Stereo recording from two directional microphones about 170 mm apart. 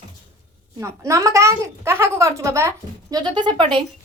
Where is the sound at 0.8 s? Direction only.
15° right (ahead or behind).